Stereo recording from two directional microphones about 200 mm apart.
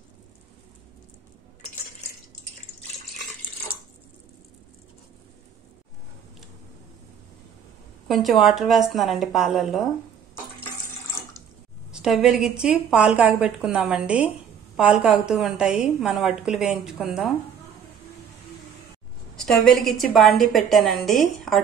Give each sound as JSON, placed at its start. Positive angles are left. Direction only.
{"t": 8.1, "sound": "a woman's voice", "side_deg": 0}
{"t": 11.9, "sound": "a woman's voice", "side_deg": 0}
{"t": 19.3, "sound": "a woman's voice", "side_deg": 0}